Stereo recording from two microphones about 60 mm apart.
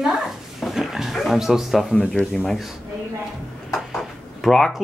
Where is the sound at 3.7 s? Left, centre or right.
Centre.